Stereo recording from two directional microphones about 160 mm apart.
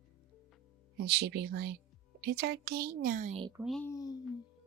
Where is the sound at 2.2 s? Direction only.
80° right; by 3.3 s 55° right (ahead or behind).